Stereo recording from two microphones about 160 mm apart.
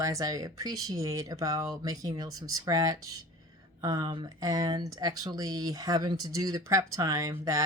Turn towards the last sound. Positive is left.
turn(degrees=-20)  # may be behind; listen again after turning